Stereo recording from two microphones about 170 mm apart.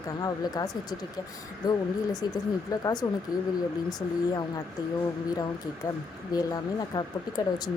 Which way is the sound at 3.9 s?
25° left (ahead or behind).